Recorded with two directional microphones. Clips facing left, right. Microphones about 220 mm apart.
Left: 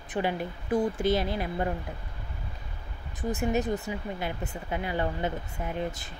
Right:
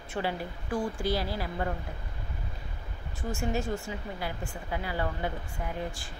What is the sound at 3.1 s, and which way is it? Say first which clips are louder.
Speech: left 4 dB; 20° left (ahead or behind).